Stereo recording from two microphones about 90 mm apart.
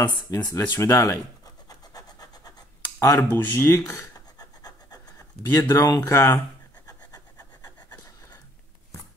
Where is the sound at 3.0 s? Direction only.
35° left (ahead or behind).